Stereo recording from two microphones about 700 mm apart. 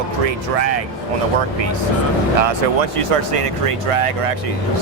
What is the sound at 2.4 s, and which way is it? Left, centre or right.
Speech, right.